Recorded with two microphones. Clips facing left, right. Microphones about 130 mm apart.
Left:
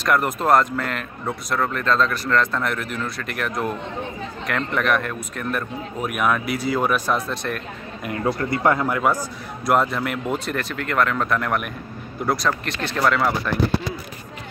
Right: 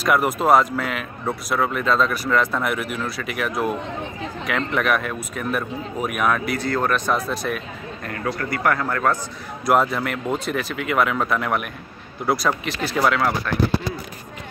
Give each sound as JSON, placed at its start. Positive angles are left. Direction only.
{"t": 0.0, "sound": "speech", "side_deg": -5}
{"t": 8.0, "sound": "a man's voice", "side_deg": 20}
{"t": 9.7, "sound": "speech", "side_deg": 0}